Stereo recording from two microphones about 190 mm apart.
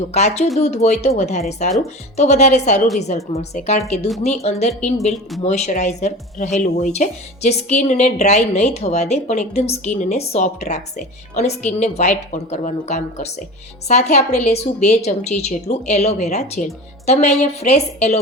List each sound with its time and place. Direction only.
0.1 s speech: 35° left (ahead or behind)